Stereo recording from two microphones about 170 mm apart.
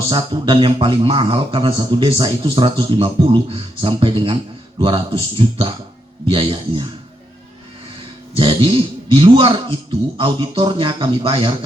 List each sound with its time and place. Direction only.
0.1 s speech: 30° right (ahead or behind)
8.4 s a man's voice: 30° right (ahead or behind)